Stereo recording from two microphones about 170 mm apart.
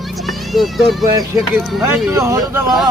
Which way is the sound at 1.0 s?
20° right (ahead or behind).